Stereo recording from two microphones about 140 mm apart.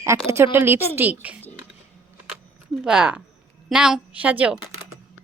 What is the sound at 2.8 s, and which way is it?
A woman's voice, 5° right (ahead or behind).